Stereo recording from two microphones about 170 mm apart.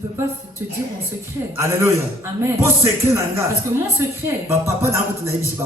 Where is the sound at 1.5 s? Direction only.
15° right (ahead or behind).